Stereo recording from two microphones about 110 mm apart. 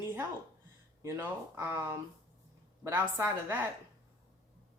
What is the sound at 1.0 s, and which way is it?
Speech, 20° right (ahead or behind).